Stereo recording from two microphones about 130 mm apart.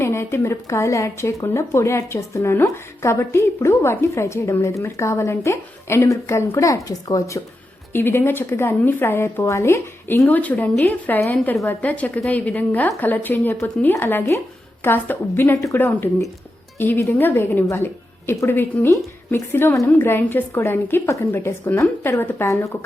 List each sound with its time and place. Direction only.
0.0 s a woman's voice: 20° left (ahead or behind)